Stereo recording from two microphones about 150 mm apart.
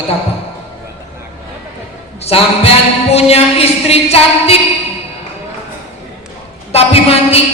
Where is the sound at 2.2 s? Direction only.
40° left (ahead or behind).